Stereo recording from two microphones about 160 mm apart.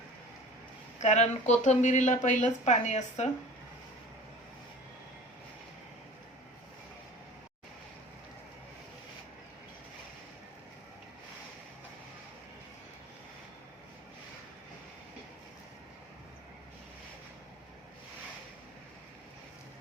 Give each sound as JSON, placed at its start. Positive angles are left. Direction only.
{"t": 0.9, "sound": "a woman's voice", "side_deg": 45}